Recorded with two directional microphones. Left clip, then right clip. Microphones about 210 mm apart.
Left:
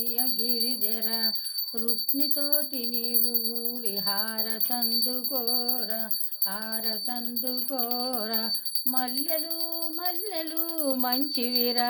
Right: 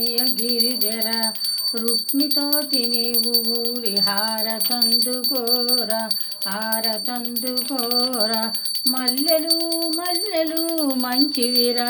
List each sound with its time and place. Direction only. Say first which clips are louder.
11.1 s jingle bell: right 8 dB; 50° left (ahead or behind)